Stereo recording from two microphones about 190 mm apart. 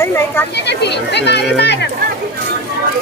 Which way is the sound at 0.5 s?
65° left (ahead or behind).